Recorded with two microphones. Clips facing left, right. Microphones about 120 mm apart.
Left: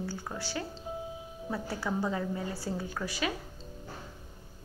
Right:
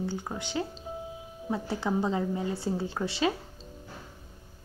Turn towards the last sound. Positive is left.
turn(degrees=-25)  # may be behind; listen again after turning